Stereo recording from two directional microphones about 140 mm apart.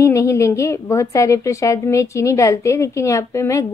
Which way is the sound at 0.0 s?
20° left (ahead or behind).